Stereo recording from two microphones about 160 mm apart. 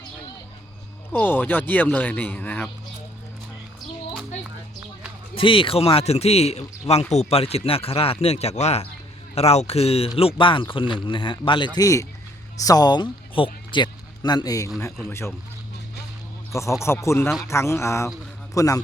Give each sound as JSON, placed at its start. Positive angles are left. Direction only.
{"t": 1.1, "sound": "speech", "side_deg": 10}
{"t": 5.3, "sound": "speech", "side_deg": 35}
{"t": 11.8, "sound": "a man's voice", "side_deg": 20}
{"t": 16.8, "sound": "a man's voice", "side_deg": 15}